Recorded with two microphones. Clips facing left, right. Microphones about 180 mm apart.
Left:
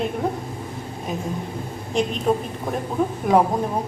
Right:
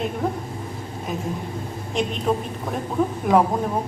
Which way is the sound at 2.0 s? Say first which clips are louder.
Left 2 dB; centre (ahead or behind).